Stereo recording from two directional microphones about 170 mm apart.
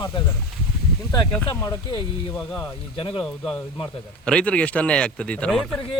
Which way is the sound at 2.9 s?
30° left (ahead or behind).